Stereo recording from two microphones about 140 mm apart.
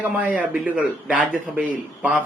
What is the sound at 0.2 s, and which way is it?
A man's voice, 10° right (ahead or behind).